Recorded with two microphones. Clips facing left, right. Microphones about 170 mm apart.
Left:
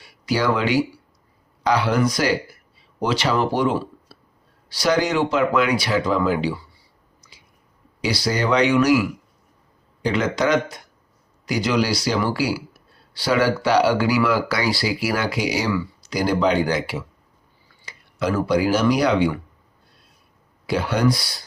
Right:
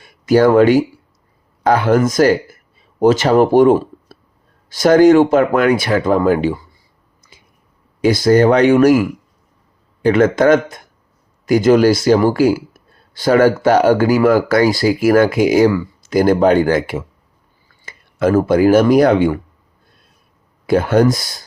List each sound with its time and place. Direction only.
0.0 s speech: 50° right (ahead or behind)
7.2 s a sound: 50° right (ahead or behind)
8.0 s speech: 50° right (ahead or behind)
20.7 s speech: 50° right (ahead or behind)